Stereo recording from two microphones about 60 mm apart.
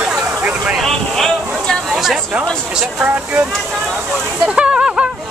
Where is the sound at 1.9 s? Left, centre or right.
Centre.